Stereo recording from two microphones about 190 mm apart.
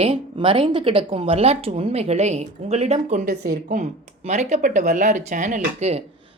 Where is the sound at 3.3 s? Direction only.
60° right (ahead or behind).